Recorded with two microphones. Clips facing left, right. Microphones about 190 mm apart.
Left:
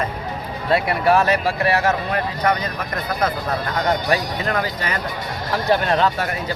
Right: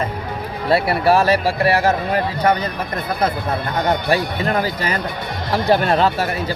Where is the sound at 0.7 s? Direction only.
35° right (ahead or behind).